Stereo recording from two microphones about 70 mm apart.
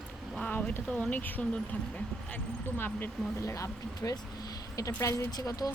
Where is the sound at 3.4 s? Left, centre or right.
Left.